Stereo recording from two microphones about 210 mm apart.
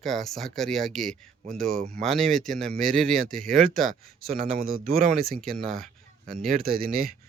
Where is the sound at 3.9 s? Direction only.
40° right (ahead or behind).